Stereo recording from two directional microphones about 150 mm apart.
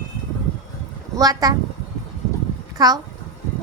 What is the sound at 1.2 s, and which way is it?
Speech, 25° right (ahead or behind).